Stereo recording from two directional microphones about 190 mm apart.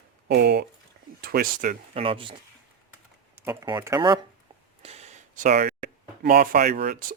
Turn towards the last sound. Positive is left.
turn(degrees=-50)  # may be behind; listen again after turning